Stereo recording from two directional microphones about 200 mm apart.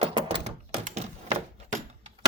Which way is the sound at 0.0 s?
30° right (ahead or behind).